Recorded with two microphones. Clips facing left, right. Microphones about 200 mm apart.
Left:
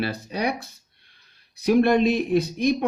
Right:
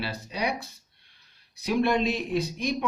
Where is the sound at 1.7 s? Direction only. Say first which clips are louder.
Left 6 dB; 55° left (ahead or behind).